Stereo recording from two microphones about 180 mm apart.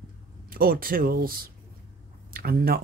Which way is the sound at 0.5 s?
55° right (ahead or behind).